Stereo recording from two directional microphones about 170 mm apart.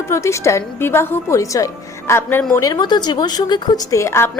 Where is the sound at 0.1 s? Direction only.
15° left (ahead or behind).